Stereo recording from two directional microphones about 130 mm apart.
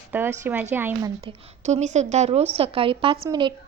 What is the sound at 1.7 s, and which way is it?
A woman's voice, 65° right (ahead or behind).